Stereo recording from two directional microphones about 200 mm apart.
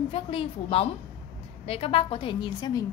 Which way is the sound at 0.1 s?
30° left (ahead or behind).